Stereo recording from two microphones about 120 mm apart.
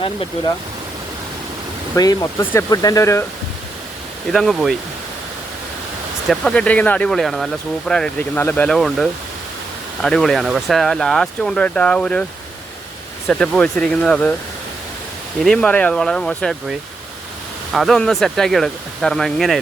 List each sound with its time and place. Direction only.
2.0 s speech: 30° left (ahead or behind)
2.4 s speech: 20° left (ahead or behind)
2.6 s speech: 30° left (ahead or behind)
4.3 s speech: centre (ahead or behind)
6.2 s speech: 5° left (ahead or behind)
8.4 s speech: 15° left (ahead or behind)
13.2 s speech: centre (ahead or behind)
15.4 s speech: 5° left (ahead or behind)
17.7 s speech: centre (ahead or behind)